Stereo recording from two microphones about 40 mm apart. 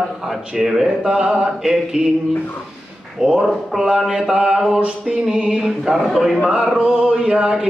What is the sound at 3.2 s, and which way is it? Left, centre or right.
Speech, centre.